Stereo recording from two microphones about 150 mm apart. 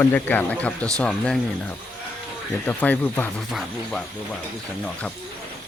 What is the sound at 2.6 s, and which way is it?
Speech, 10° left (ahead or behind).